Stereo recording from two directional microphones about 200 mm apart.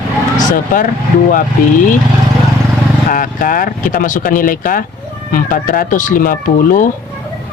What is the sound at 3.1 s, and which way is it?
Speech, 45° left (ahead or behind).